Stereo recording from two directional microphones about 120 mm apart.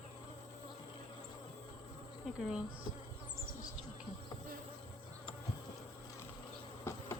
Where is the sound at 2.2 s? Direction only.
5° right (ahead or behind).